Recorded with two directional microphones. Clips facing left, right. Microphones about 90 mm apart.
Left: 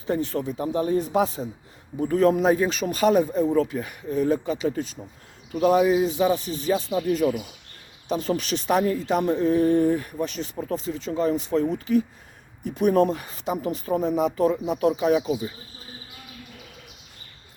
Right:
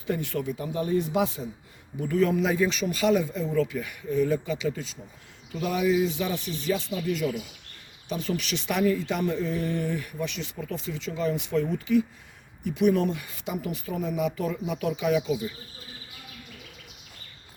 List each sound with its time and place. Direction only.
0.1 s speech: 35° left (ahead or behind)